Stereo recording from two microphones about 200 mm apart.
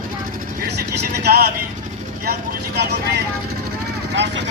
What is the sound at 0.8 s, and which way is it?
Vehicle, 50° right (ahead or behind).